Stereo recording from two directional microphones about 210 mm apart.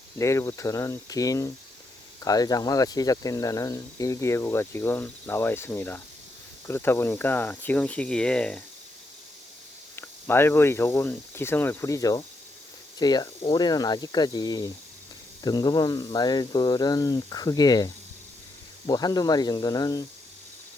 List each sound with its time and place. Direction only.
0.2 s speech: 15° left (ahead or behind)
9.9 s speech: 10° left (ahead or behind)